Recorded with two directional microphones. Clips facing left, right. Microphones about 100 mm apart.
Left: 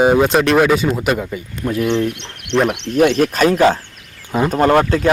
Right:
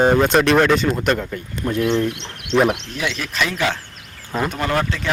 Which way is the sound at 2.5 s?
10° right (ahead or behind).